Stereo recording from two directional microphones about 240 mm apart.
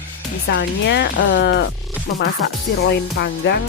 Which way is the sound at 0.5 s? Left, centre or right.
Left.